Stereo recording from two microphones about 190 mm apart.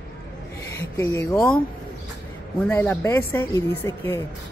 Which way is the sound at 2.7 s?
10° left (ahead or behind).